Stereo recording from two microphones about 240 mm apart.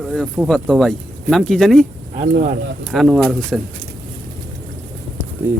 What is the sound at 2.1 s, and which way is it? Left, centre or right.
Speech, right.